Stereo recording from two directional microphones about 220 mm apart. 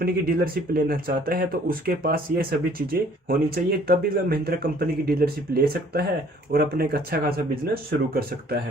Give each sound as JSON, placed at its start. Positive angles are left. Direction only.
{"t": 0.0, "sound": "speech", "side_deg": -40}